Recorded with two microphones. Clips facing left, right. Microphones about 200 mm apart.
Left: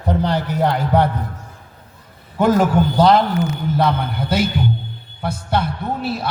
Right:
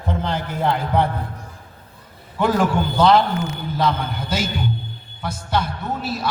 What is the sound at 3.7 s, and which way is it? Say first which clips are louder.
A man's voice: left 1 dB; 60° left (ahead or behind).